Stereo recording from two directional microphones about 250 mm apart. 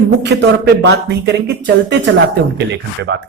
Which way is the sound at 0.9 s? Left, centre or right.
Right.